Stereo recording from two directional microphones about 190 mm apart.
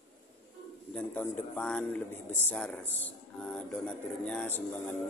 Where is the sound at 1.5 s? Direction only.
5° left (ahead or behind).